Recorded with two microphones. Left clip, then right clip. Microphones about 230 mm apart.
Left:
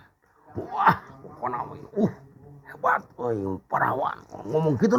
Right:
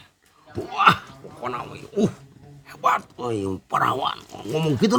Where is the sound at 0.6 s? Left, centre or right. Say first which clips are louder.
Right 4 dB; right.